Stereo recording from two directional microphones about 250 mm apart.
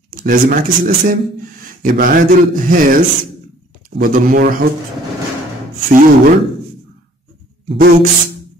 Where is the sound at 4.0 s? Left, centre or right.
Right.